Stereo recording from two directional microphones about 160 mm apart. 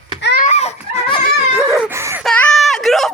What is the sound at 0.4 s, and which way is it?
Baby cry, 40° left (ahead or behind).